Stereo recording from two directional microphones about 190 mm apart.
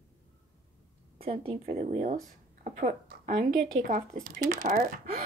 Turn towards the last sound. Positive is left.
turn(degrees=-45)  # may be behind; listen again after turning